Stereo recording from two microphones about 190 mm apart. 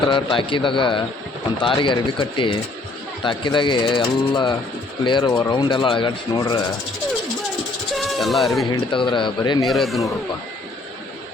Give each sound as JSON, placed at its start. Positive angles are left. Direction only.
{"t": 0.1, "sound": "speech", "side_deg": 25}
{"t": 7.9, "sound": "a sound", "side_deg": 0}
{"t": 8.6, "sound": "speech", "side_deg": 25}
{"t": 9.6, "sound": "speech", "side_deg": 0}